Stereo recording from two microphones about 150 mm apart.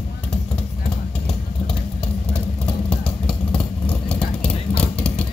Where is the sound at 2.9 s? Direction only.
5° left (ahead or behind).